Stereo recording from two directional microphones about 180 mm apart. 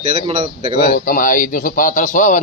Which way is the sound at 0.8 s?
50° left (ahead or behind).